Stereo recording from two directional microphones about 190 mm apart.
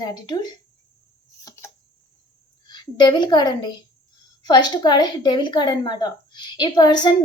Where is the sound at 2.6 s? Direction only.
20° left (ahead or behind).